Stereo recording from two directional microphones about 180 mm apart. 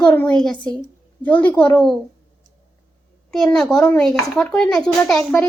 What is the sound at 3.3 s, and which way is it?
Speech, centre (ahead or behind).